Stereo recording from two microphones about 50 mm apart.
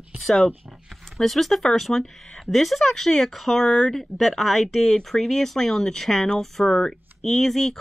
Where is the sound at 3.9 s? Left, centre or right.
Centre.